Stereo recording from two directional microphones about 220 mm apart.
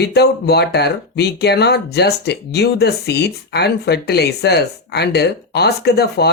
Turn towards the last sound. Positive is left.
turn(degrees=50)  # may be behind; listen again after turning